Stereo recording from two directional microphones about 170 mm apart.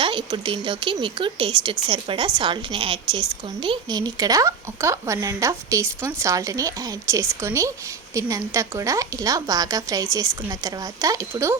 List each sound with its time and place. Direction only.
0.0 s speech: 30° right (ahead or behind)